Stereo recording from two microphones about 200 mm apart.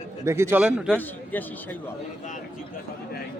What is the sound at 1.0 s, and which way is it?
Speech, 10° left (ahead or behind).